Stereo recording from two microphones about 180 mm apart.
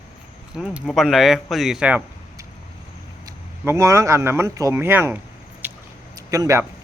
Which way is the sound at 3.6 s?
15° right (ahead or behind).